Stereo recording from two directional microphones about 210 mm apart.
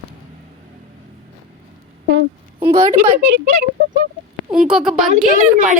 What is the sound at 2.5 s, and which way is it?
Speech, 20° right (ahead or behind).